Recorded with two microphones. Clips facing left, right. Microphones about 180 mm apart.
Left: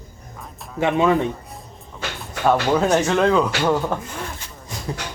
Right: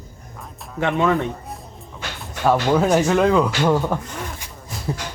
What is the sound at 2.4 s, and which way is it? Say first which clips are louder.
Speech: right 1 dB; centre (ahead or behind).